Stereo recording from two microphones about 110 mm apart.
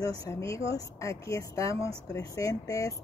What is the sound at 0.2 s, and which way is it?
Speech, 30° left (ahead or behind).